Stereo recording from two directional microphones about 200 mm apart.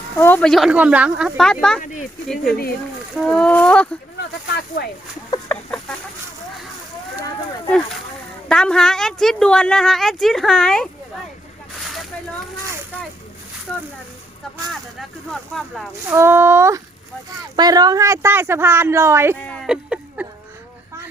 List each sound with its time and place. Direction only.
0.2 s a woman's voice: 10° left (ahead or behind)
1.8 s speech: 40° left (ahead or behind)
2.2 s a woman's voice: centre (ahead or behind)
4.8 s speech: 55° left (ahead or behind)
5.3 s chicken: 5° left (ahead or behind)
8.4 s a woman's voice: 5° left (ahead or behind)
14.7 s a woman's voice: centre (ahead or behind)
16.0 s speech: 10° right (ahead or behind)
19.4 s speech: 5° left (ahead or behind)
19.6 s speech: 5° right (ahead or behind)